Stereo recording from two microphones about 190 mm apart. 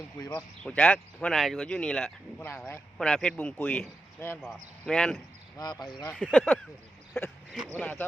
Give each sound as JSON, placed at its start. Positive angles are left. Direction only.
{"t": 0.2, "sound": "speech", "side_deg": 15}
{"t": 0.8, "sound": "speech", "side_deg": 5}
{"t": 5.5, "sound": "speech", "side_deg": 20}
{"t": 6.3, "sound": "speech", "side_deg": 5}